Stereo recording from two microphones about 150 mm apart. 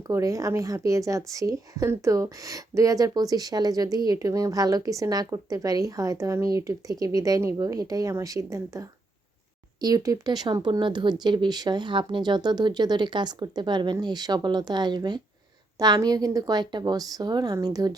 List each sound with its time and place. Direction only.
0.1 s speech: 20° right (ahead or behind)